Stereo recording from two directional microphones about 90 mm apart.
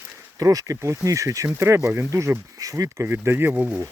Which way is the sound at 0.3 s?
40° right (ahead or behind).